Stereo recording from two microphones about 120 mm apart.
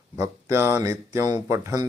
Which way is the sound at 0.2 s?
20° right (ahead or behind).